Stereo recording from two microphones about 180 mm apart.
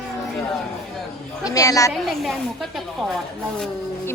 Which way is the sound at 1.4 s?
20° left (ahead or behind).